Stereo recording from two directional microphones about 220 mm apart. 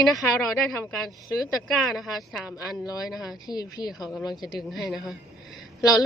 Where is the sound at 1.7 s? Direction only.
Centre (ahead or behind).